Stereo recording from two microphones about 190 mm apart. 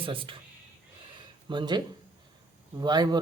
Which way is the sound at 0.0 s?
25° right (ahead or behind).